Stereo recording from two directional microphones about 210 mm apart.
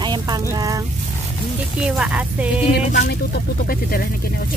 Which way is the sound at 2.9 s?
50° left (ahead or behind).